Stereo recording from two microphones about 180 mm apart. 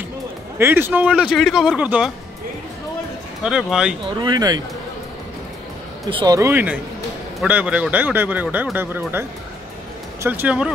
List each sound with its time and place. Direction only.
0.6 s speech: 10° right (ahead or behind)
3.4 s speech: 5° right (ahead or behind)
4.2 s speech: 20° right (ahead or behind)
6.0 s a man's voice: 25° right (ahead or behind)
10.2 s a man's voice: 10° right (ahead or behind)